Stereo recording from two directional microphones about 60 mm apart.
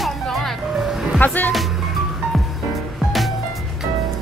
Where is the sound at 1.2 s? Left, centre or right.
Left.